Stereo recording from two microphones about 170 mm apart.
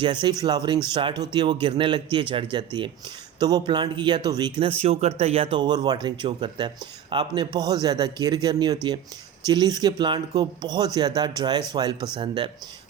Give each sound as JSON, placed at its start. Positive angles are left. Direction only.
{"t": 0.0, "sound": "speech", "side_deg": -25}